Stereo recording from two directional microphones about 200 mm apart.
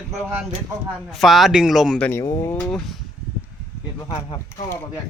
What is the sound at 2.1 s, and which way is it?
Speech, 15° left (ahead or behind).